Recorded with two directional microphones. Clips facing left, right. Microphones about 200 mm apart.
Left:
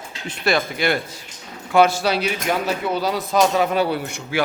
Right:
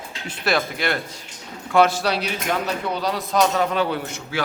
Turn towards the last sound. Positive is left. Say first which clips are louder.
# left 3 dB
turn(degrees=10)  # may be behind; listen again after turning